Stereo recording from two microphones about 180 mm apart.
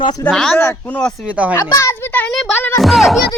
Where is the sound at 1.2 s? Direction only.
5° right (ahead or behind).